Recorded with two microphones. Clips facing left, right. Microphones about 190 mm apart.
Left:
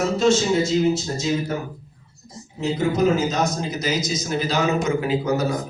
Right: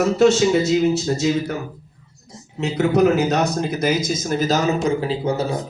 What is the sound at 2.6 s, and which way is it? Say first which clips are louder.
A man's voice: right 4 dB; 70° right (ahead or behind).